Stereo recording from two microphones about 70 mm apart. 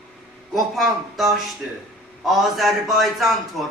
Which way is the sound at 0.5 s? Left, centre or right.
Centre.